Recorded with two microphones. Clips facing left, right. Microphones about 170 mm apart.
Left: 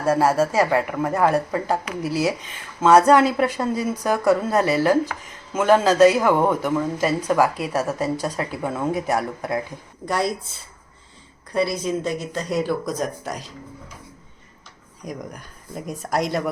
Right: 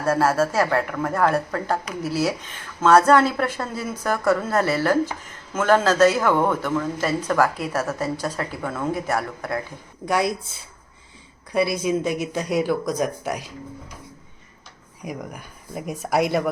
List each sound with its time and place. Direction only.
0.0 s speech: 15° left (ahead or behind)
10.1 s speech: 5° right (ahead or behind)
11.5 s speech: 5° right (ahead or behind)
15.0 s speech: 5° right (ahead or behind)